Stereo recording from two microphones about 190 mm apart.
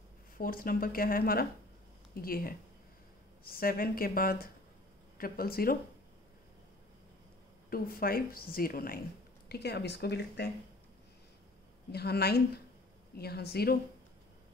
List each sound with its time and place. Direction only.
0.4 s a woman's voice: 50° left (ahead or behind)
7.7 s a woman's voice: 50° left (ahead or behind)
9.5 s speech: 60° left (ahead or behind)
11.9 s speech: 55° left (ahead or behind)